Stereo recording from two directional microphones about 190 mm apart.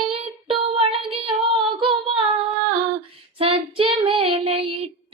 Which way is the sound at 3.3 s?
30° right (ahead or behind).